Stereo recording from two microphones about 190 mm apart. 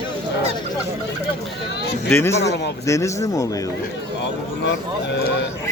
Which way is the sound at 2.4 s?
65° left (ahead or behind).